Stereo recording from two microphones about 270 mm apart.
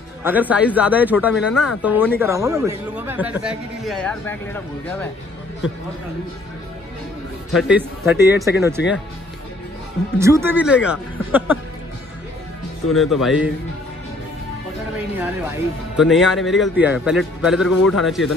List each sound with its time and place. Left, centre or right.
0.2 s a man's voice: centre
7.5 s a man's voice: centre
10.1 s speech: centre
12.9 s a man's voice: centre
16.0 s a man's voice: centre